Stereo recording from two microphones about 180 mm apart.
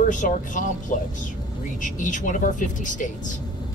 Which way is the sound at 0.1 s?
45° left (ahead or behind).